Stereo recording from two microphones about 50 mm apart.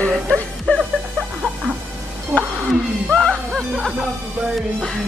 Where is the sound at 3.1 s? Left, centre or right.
Centre.